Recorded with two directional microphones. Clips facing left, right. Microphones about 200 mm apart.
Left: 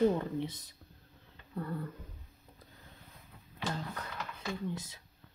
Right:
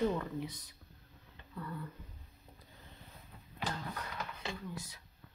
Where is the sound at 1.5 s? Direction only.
40° left (ahead or behind).